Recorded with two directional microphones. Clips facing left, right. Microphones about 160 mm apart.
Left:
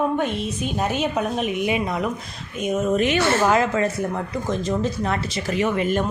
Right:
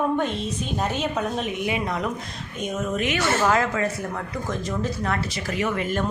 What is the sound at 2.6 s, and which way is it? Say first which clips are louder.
Speech: left 6 dB; 5° left (ahead or behind).